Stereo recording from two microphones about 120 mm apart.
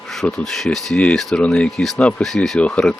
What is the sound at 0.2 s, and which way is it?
Speech, centre (ahead or behind).